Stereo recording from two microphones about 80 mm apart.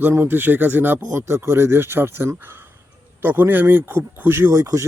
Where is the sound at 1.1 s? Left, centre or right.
Right.